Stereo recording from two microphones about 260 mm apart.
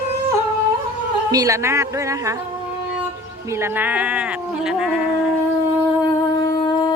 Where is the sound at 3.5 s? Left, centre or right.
Centre.